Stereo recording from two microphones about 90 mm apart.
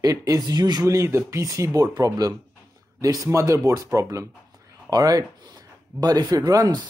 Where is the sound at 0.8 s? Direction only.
35° right (ahead or behind).